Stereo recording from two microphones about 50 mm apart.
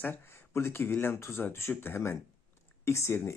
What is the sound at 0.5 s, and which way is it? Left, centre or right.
Speech, left.